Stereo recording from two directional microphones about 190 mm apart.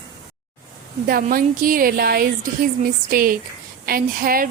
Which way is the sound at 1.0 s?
50° right (ahead or behind).